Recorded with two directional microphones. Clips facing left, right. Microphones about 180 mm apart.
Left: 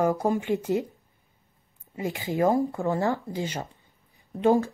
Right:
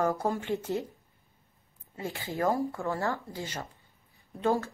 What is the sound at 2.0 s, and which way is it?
A woman's voice, 15° left (ahead or behind).